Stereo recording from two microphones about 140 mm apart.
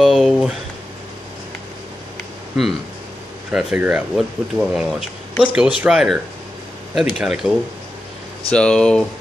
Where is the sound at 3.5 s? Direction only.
10° right (ahead or behind).